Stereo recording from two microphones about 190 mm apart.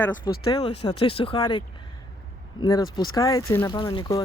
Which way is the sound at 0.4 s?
25° left (ahead or behind).